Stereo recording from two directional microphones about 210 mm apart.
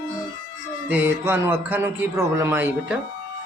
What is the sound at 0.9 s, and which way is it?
A man's voice, 10° right (ahead or behind).